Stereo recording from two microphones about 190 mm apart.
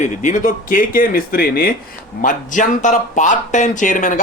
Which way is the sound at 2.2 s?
40° left (ahead or behind).